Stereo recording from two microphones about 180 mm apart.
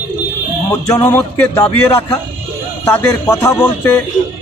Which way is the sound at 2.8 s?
10° left (ahead or behind).